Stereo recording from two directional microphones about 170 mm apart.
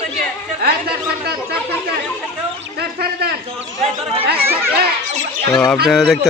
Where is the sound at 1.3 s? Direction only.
70° right (ahead or behind).